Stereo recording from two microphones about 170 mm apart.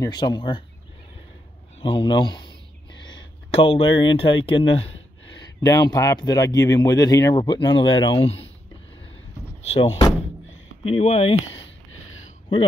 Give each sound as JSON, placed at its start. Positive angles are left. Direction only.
{"t": 0.0, "sound": "speech", "side_deg": 25}
{"t": 1.8, "sound": "a man's voice", "side_deg": 30}
{"t": 3.5, "sound": "speech", "side_deg": 35}
{"t": 5.6, "sound": "speech", "side_deg": 20}
{"t": 9.6, "sound": "speech", "side_deg": 40}